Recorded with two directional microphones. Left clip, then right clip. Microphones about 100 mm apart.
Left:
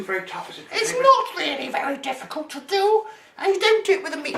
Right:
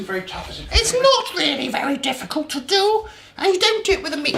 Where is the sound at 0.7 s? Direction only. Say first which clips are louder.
Right 1 dB; 35° right (ahead or behind).